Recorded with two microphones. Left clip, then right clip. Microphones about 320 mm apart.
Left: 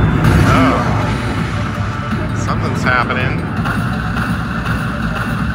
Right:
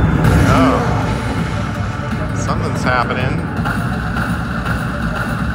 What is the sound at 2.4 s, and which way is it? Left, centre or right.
Music, centre.